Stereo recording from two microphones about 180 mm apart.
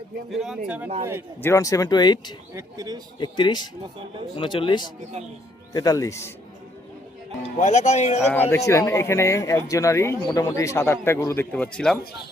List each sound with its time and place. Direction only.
0.3 s speech: centre (ahead or behind)
1.4 s speech: 15° left (ahead or behind)
2.5 s speech: 20° right (ahead or behind)
3.2 s speech: 25° left (ahead or behind)
7.6 s speech: 40° left (ahead or behind)
8.3 s speech: 15° left (ahead or behind)
11.5 s speech: 5° left (ahead or behind)